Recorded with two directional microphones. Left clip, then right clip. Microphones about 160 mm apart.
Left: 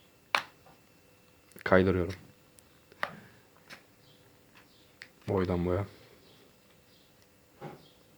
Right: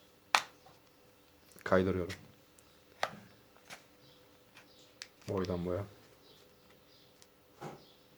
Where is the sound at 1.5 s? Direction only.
45° left (ahead or behind).